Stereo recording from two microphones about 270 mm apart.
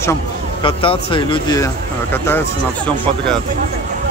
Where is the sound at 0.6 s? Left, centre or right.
Centre.